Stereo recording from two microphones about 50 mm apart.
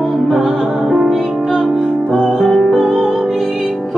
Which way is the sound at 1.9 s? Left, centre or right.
Centre.